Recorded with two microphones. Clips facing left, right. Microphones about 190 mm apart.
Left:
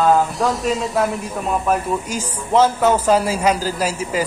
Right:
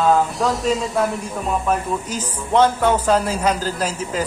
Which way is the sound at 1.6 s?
5° left (ahead or behind).